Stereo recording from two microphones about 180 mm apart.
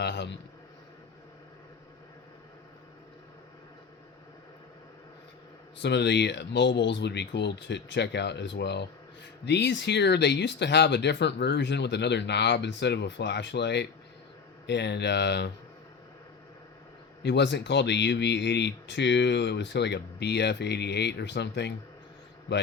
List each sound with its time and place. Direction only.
0.0 s a sound: 70° left (ahead or behind)
5.8 s speech: 75° left (ahead or behind)
17.2 s a man's voice: 75° left (ahead or behind)